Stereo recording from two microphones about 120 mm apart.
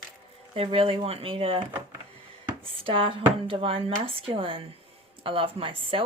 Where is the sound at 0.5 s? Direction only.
50° right (ahead or behind).